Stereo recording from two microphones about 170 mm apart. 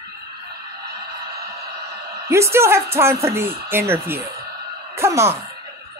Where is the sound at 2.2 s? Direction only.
15° right (ahead or behind).